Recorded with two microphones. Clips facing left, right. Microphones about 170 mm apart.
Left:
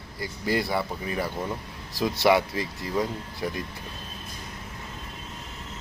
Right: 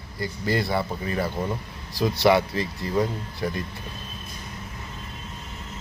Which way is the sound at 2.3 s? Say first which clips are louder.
Right 1 dB; 15° left (ahead or behind).